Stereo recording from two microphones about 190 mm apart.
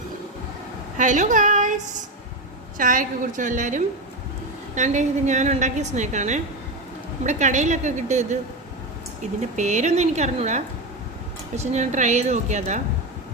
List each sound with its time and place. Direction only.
0.9 s a woman's voice: 40° right (ahead or behind)
9.6 s a woman's voice: 40° right (ahead or behind)